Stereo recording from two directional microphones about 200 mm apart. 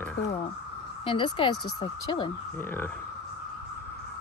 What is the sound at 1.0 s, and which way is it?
Speech, 25° left (ahead or behind).